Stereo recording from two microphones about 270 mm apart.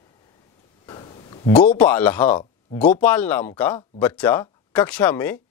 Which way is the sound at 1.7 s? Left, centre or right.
Centre.